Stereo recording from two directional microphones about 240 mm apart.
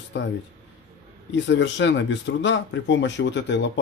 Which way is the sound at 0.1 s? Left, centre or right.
Left.